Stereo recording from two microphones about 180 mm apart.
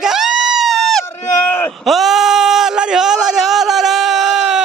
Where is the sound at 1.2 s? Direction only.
15° left (ahead or behind).